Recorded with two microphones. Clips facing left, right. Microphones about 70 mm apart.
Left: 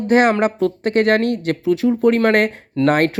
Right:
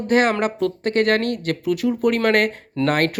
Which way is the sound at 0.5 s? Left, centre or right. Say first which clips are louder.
Left 3 dB; left.